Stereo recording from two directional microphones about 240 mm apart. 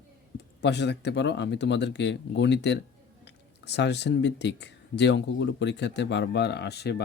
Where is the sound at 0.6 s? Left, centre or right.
Left.